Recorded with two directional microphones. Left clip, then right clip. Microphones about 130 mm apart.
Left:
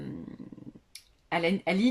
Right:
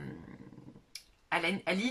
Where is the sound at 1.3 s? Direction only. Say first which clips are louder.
Left 4 dB; 25° left (ahead or behind).